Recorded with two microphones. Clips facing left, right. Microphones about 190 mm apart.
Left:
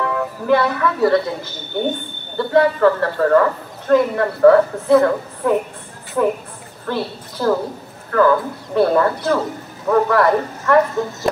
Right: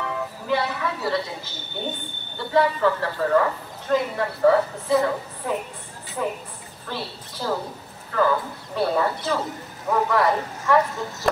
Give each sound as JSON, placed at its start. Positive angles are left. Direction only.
{"t": 0.0, "sound": "a woman's voice", "side_deg": 55}
{"t": 6.9, "sound": "speech", "side_deg": 55}